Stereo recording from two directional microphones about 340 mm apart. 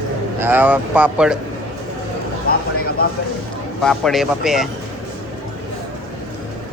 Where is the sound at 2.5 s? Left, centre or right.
Left.